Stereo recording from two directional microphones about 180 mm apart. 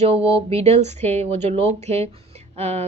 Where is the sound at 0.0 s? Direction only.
35° right (ahead or behind).